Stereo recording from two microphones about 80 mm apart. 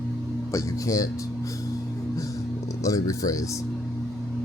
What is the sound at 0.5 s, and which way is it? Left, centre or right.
Speech, left.